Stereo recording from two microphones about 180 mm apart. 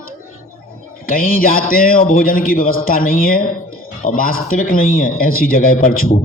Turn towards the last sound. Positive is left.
turn(degrees=55)  # may be behind; listen again after turning